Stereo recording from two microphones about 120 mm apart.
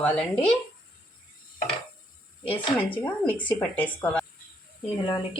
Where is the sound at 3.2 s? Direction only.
10° left (ahead or behind).